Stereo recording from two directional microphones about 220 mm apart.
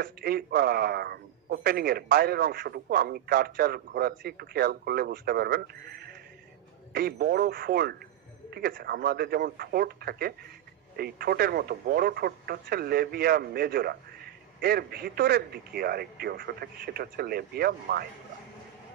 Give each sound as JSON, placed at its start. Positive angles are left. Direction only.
{"t": 0.0, "sound": "a man's voice", "side_deg": -45}